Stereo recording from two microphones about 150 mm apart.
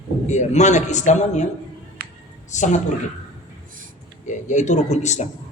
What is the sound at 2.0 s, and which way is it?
Music, 90° right.